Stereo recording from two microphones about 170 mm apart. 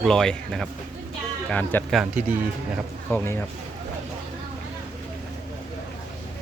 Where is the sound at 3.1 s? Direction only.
15° left (ahead or behind).